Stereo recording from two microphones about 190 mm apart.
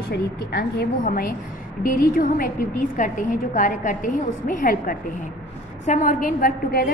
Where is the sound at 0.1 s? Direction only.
55° left (ahead or behind).